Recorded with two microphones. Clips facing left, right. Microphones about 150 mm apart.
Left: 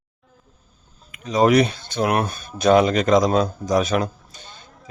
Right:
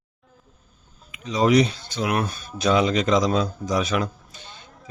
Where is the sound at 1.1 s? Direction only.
50° left (ahead or behind).